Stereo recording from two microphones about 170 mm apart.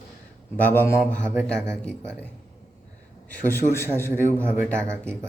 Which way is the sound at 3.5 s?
15° left (ahead or behind).